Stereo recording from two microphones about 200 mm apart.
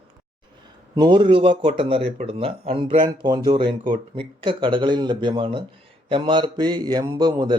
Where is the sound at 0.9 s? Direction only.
20° right (ahead or behind).